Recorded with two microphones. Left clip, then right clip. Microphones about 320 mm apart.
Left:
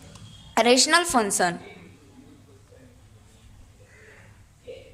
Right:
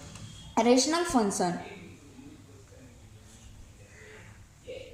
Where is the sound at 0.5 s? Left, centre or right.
Left.